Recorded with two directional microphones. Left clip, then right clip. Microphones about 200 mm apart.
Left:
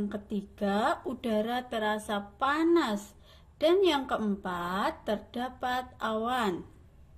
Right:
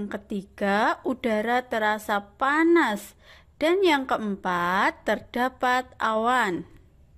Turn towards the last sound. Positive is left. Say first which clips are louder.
# right 7 dB
turn(degrees=-50)  # may be behind; listen again after turning